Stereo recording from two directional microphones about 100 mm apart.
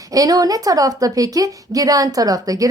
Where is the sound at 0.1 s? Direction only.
35° right (ahead or behind).